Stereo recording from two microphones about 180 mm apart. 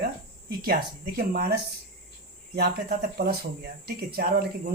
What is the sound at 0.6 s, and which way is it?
Speech, 55° right (ahead or behind).